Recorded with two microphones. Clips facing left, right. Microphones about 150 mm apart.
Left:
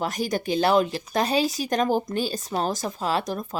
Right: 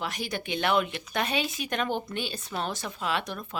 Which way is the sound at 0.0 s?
40° left (ahead or behind).